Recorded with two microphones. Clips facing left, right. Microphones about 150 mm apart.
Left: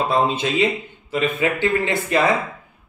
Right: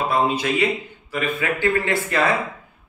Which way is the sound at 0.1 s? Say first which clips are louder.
Left 1 dB; 25° left (ahead or behind).